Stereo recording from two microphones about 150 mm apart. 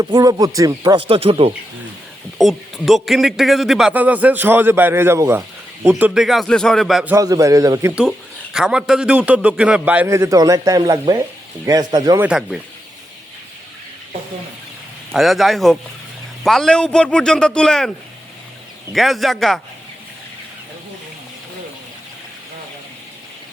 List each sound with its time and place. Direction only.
0.0 s a man's voice: 25° right (ahead or behind); by 1.5 s 40° right (ahead or behind)
2.4 s a man's voice: centre (ahead or behind); by 5.4 s 20° right (ahead or behind)
6.0 s speech: 5° right (ahead or behind)
7.2 s a man's voice: 25° right (ahead or behind)
8.5 s a man's voice: 5° right (ahead or behind); by 12.2 s 25° right (ahead or behind)
12.2 s speech: 5° right (ahead or behind)
15.1 s speech: centre (ahead or behind)
18.9 s speech: centre (ahead or behind)